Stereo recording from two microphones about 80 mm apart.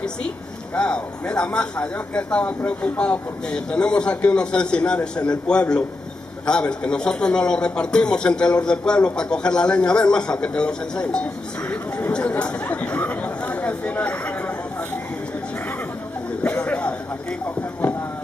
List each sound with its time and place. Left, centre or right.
0.7 s speech: centre
11.7 s chatter: centre
16.6 s a sound: centre